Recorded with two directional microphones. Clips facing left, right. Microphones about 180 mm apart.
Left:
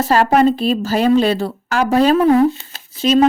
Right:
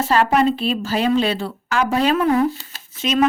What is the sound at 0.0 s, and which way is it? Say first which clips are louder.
A woman's voice: left 4 dB; 40° left (ahead or behind).